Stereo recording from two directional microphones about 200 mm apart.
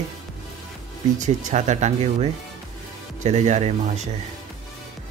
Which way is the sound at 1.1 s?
40° right (ahead or behind).